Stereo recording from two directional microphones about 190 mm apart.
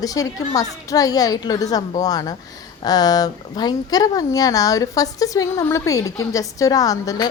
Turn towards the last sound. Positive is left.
turn(degrees=20)  # may be behind; listen again after turning